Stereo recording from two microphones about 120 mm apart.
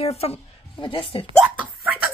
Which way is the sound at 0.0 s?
55° left (ahead or behind).